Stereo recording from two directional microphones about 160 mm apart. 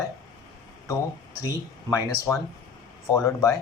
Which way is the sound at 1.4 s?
20° left (ahead or behind).